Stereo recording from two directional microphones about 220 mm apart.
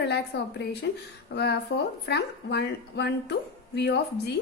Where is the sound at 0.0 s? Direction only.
50° left (ahead or behind).